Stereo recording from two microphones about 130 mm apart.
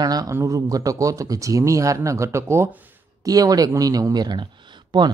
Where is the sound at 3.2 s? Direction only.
30° right (ahead or behind).